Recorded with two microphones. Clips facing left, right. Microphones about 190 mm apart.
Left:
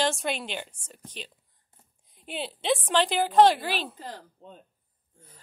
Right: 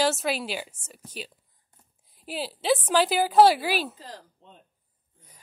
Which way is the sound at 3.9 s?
55° left (ahead or behind).